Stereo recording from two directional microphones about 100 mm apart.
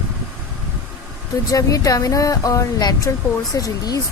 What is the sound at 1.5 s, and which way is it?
Speech, 35° left (ahead or behind).